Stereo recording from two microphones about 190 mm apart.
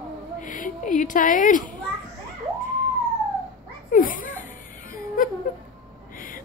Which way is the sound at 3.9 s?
45° left (ahead or behind).